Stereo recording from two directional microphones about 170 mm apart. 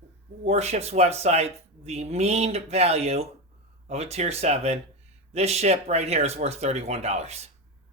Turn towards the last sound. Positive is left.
turn(degrees=-40)  # may be behind; listen again after turning